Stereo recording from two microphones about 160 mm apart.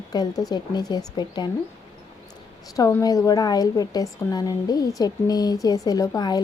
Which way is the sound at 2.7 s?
20° left (ahead or behind).